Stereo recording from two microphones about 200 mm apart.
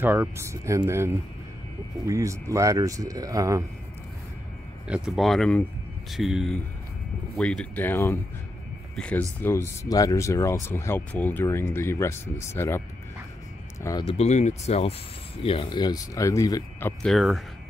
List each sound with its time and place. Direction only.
0.0 s speech: 10° right (ahead or behind)
4.8 s speech: 5° right (ahead or behind); by 12.8 s 15° left (ahead or behind)
13.8 s speech: 25° left (ahead or behind)
17.0 s speech: centre (ahead or behind)